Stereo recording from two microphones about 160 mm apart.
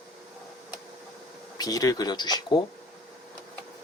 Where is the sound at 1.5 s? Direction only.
25° left (ahead or behind).